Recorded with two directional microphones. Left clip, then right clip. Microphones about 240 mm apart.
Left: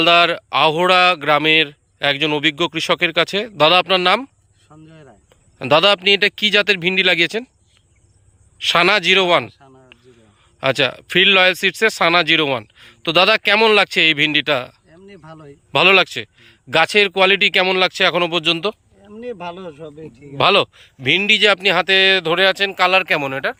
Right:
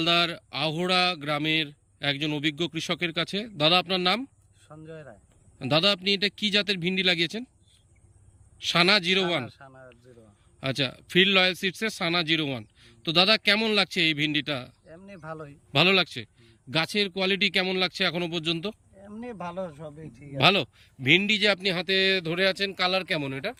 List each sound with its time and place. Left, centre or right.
0.0 s speech: centre
5.5 s speech: centre
8.5 s speech: centre
9.9 s a sound: centre
10.6 s speech: centre
14.8 s a sound: right
15.7 s speech: centre
20.3 s speech: centre